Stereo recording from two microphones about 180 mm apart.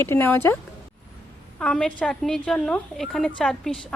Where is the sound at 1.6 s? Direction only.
5° left (ahead or behind).